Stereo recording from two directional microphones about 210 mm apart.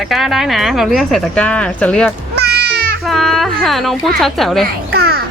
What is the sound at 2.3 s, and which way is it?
Music, 50° right (ahead or behind).